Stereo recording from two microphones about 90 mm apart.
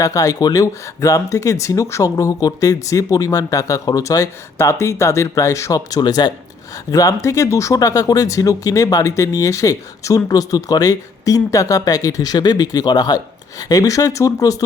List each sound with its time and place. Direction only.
0.0 s speech: 40° left (ahead or behind)
4.5 s speech: 30° left (ahead or behind); by 6.3 s 50° left (ahead or behind)
6.9 s speech: 40° left (ahead or behind)